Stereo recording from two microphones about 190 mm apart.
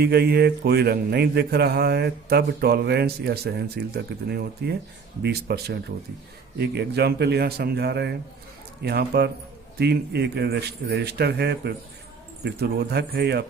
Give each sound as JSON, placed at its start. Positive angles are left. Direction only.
{"t": 0.0, "sound": "speech", "side_deg": -55}